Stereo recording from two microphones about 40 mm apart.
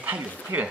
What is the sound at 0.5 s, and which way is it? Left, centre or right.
Speech, right.